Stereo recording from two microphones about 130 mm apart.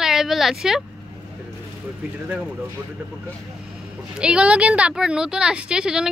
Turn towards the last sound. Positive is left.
turn(degrees=-5)  # may be behind; listen again after turning